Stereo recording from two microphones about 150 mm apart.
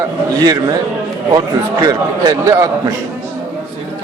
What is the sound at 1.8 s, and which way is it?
A man's voice, 25° right (ahead or behind).